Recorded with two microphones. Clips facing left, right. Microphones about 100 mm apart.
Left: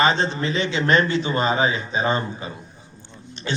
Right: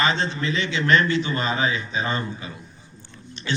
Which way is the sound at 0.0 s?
30° left (ahead or behind).